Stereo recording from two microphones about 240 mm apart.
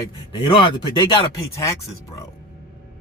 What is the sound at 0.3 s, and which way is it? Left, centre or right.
Speech, centre.